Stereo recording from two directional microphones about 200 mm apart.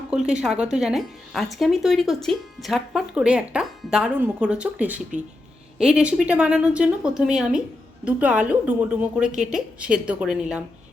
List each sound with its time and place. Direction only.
0.1 s speech: 5° right (ahead or behind)